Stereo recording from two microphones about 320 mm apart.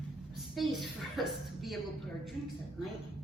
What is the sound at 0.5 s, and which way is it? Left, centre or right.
A woman's voice, centre.